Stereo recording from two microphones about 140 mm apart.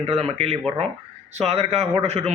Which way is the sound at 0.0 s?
45° right (ahead or behind).